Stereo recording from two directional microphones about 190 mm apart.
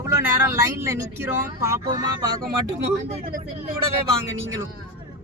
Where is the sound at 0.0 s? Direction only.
15° right (ahead or behind).